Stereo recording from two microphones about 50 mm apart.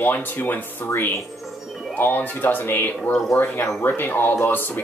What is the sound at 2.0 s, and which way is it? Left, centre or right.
Speech, left.